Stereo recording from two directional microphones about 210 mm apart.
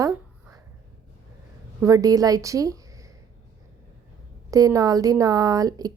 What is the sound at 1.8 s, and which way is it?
Speech, 15° right (ahead or behind).